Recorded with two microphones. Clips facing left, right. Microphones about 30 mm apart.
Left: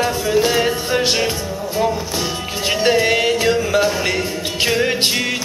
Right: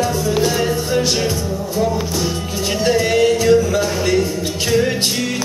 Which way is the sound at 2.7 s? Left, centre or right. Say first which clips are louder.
Left 1 dB; left.